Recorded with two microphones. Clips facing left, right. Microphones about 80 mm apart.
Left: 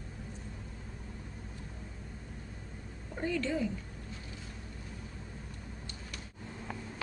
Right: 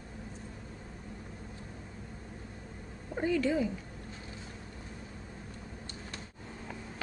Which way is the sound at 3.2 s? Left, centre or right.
Centre.